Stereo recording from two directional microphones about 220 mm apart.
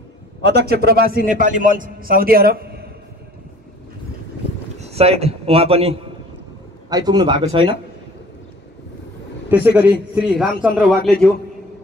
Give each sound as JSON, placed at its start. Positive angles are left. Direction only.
{"t": 0.5, "sound": "a man's voice", "side_deg": -45}
{"t": 4.7, "sound": "a man's voice", "side_deg": -30}
{"t": 9.5, "sound": "a man's voice", "side_deg": -10}